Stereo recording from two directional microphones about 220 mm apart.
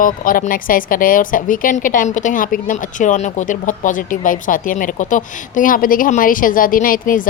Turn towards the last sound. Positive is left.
turn(degrees=40)  # may be behind; listen again after turning